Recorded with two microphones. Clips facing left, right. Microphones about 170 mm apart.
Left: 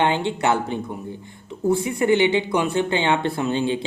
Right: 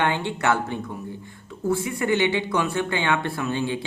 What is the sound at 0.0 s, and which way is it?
A woman's voice, 20° left (ahead or behind).